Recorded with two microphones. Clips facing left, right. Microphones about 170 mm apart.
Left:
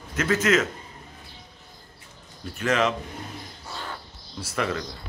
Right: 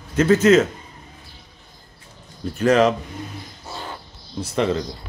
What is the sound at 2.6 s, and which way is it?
Speech, 35° right (ahead or behind).